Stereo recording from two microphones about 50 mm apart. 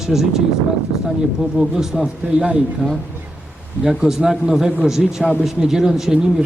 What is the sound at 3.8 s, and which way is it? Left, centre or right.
A man's voice, centre.